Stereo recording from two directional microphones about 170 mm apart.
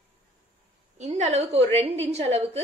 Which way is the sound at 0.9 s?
40° right (ahead or behind).